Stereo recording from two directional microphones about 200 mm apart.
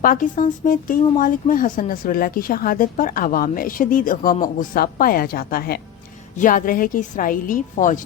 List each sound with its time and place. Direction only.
0.0 s a woman's voice: 40° left (ahead or behind)